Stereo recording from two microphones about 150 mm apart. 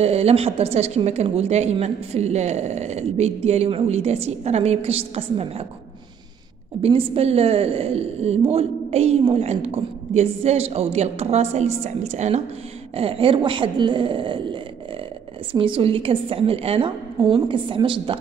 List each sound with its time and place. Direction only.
0.0 s a woman's voice: 45° right (ahead or behind)
6.8 s a woman's voice: 40° right (ahead or behind)